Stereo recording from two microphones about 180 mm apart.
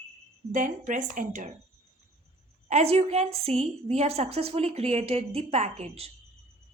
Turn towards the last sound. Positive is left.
turn(degrees=-40)  # may be behind; listen again after turning